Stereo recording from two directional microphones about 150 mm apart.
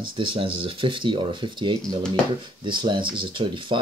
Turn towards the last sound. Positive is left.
turn(degrees=-35)  # may be behind; listen again after turning